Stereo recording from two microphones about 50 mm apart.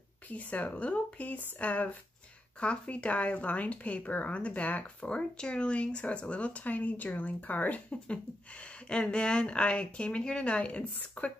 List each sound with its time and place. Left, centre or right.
0.3 s speech: left